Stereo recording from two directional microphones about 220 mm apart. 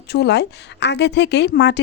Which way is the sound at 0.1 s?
50° left (ahead or behind).